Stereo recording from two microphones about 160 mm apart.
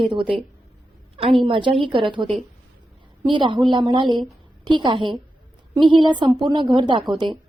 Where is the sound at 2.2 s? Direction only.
Centre (ahead or behind).